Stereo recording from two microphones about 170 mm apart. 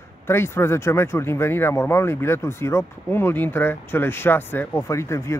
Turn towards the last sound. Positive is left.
turn(degrees=15)  # may be behind; listen again after turning